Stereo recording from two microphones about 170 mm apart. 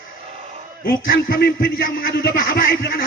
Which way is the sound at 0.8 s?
60° left (ahead or behind).